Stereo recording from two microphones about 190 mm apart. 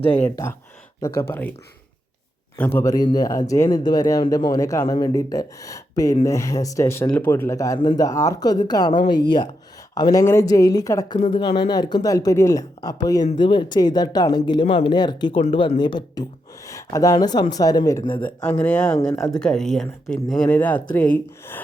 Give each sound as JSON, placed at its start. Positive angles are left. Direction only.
{"t": 0.1, "sound": "speech", "side_deg": 10}
{"t": 2.6, "sound": "speech", "side_deg": 10}
{"t": 19.1, "sound": "speech", "side_deg": 20}
{"t": 19.4, "sound": "speech", "side_deg": 5}